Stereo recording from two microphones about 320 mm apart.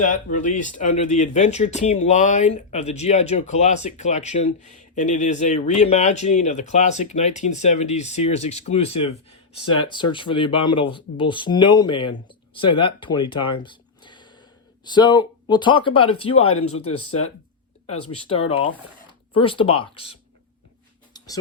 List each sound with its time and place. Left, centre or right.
0.1 s speech: left
13.6 s a sound: centre
14.8 s speech: centre